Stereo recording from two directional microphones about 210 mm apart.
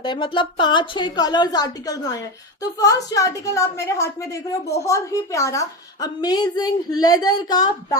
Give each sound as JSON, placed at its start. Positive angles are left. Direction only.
{"t": 0.0, "sound": "a woman's voice", "side_deg": 20}